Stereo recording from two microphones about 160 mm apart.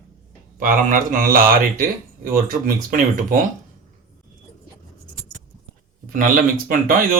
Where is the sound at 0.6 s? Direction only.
60° right (ahead or behind).